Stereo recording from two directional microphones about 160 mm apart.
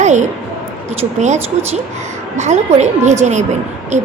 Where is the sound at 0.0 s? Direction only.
50° right (ahead or behind).